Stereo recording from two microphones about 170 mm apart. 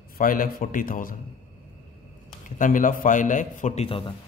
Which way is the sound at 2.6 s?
50° left (ahead or behind).